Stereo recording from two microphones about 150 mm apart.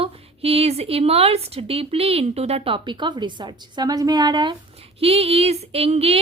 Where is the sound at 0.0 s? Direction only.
40° right (ahead or behind).